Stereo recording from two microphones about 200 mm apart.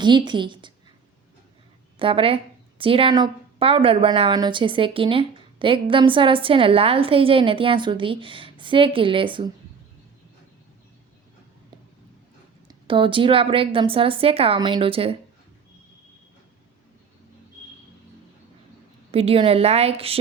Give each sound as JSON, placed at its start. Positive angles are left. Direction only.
{"t": 0.0, "sound": "a woman's voice", "side_deg": -20}
{"t": 2.0, "sound": "a woman's voice", "side_deg": -25}
{"t": 12.6, "sound": "a woman's voice", "side_deg": -25}
{"t": 19.1, "sound": "a woman's voice", "side_deg": -30}